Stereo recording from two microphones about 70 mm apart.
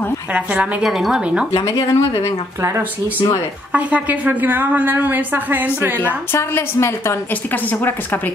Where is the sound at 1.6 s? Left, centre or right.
Left.